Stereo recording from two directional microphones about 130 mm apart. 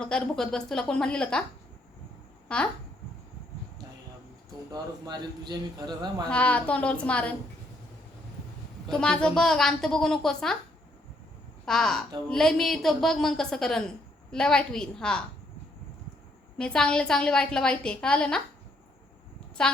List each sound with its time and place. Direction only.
0.0 s a woman's voice: 5° left (ahead or behind)
2.5 s a woman's voice: 10° left (ahead or behind)
4.7 s a man's voice: 30° right (ahead or behind)
6.2 s a woman's voice: 10° left (ahead or behind)
8.9 s a woman's voice: 5° left (ahead or behind)
11.6 s a woman's voice: 5° left (ahead or behind)
16.6 s a woman's voice: 5° left (ahead or behind)
19.6 s a woman's voice: 5° left (ahead or behind)